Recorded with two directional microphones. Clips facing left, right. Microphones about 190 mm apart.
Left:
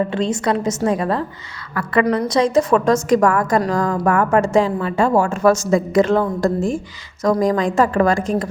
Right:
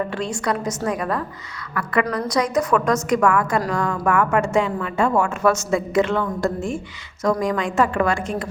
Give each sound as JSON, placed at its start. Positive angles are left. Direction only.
{"t": 0.1, "sound": "a woman's voice", "side_deg": 25}